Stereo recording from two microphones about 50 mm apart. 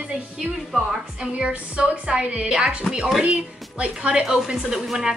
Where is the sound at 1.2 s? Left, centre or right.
Right.